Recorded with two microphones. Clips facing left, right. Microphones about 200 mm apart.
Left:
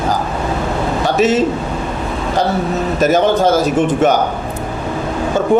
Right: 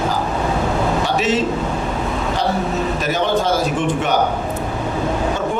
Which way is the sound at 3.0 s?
45° left (ahead or behind).